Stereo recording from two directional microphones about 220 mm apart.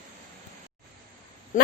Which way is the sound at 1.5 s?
35° left (ahead or behind).